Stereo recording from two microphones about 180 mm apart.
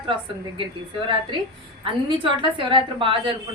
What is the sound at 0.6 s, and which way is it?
A woman's voice, 30° right (ahead or behind).